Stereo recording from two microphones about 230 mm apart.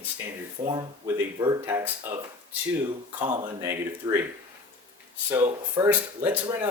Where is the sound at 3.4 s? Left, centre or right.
Centre.